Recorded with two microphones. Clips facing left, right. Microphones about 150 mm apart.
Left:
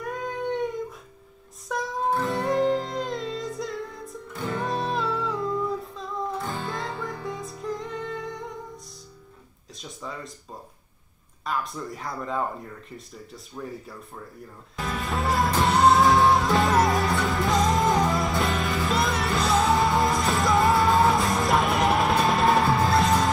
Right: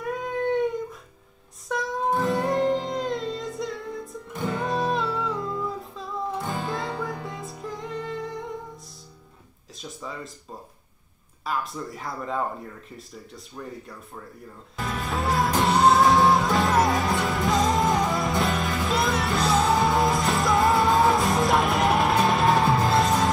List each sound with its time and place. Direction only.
0.0 s cat: centre (ahead or behind)
1.7 s music: centre (ahead or behind)
6.4 s music: 20° right (ahead or behind)
6.7 s music: centre (ahead or behind)
9.8 s a sound: centre (ahead or behind)
11.4 s speech: centre (ahead or behind)
14.8 s music: centre (ahead or behind)